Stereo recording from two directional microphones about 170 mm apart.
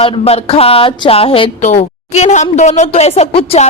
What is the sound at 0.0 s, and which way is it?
Speech, 35° left (ahead or behind).